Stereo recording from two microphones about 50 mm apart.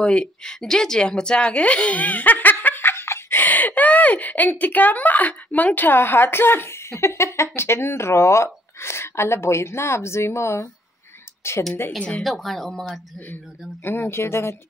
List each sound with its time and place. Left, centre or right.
0.0 s a woman's voice: centre; by 3.3 s left
3.3 s speech: left
7.5 s a woman's voice: left
8.7 s a woman's voice: left
12.2 s speech: centre
13.8 s speech: left
14.2 s a woman's voice: left